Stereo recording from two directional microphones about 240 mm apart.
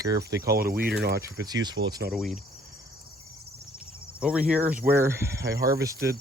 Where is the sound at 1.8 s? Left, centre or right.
Right.